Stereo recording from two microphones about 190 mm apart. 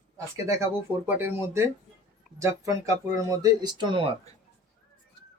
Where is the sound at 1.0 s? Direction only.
10° right (ahead or behind).